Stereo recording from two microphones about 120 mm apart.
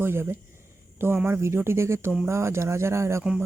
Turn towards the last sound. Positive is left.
turn(degrees=-25)  # may be behind; listen again after turning